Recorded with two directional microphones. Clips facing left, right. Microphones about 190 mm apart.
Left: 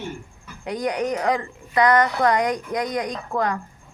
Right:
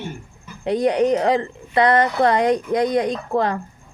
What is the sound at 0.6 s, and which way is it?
Speech, 30° right (ahead or behind).